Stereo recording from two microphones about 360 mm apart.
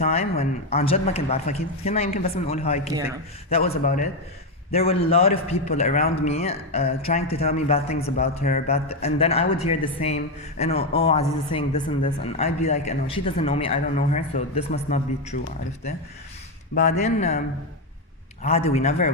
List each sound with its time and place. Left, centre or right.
0.0 s a man's voice: centre
16.7 s speech: centre
18.4 s a man's voice: centre